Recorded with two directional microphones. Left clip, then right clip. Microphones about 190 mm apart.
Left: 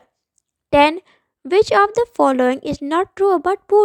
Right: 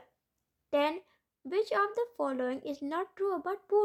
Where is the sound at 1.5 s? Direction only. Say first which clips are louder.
Left 16 dB; 40° left (ahead or behind).